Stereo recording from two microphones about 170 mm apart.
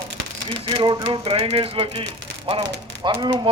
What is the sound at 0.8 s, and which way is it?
Speech, 25° right (ahead or behind).